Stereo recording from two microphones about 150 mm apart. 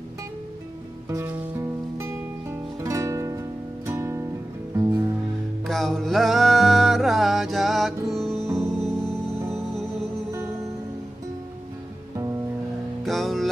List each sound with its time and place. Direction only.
1.0 s music: 20° right (ahead or behind)
5.7 s music: 5° left (ahead or behind)
13.0 s music: centre (ahead or behind)